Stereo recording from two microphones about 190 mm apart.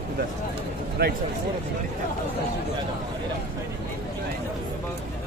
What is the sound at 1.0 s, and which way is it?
Speech, 60° right (ahead or behind).